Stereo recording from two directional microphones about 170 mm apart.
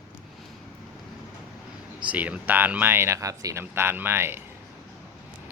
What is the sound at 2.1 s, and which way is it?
Speech, 10° right (ahead or behind).